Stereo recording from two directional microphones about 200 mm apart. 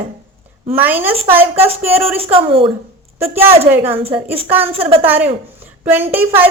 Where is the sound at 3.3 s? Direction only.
10° right (ahead or behind).